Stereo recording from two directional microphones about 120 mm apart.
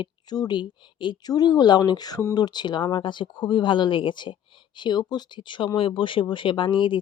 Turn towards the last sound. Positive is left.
turn(degrees=45)  # may be behind; listen again after turning